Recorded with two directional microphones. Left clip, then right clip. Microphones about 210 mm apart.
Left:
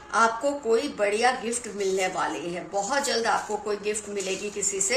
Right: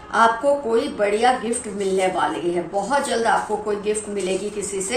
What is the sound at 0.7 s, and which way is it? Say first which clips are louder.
A woman's voice: right 4 dB; 45° left (ahead or behind).